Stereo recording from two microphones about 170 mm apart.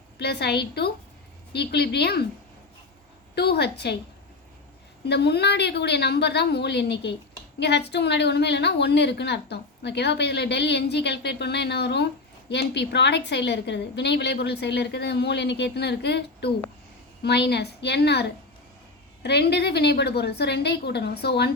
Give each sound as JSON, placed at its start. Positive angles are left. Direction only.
{"t": 0.2, "sound": "a woman's voice", "side_deg": 75}
{"t": 3.3, "sound": "a woman's voice", "side_deg": 75}
{"t": 5.0, "sound": "a woman's voice", "side_deg": 80}
{"t": 17.5, "sound": "a woman's voice", "side_deg": 75}